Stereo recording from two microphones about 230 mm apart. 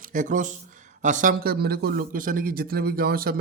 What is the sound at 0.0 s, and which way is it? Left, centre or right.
Speech, right.